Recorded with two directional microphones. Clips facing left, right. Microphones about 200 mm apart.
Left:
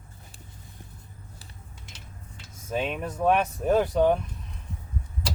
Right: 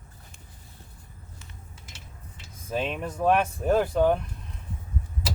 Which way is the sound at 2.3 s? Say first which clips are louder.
Even; centre (ahead or behind).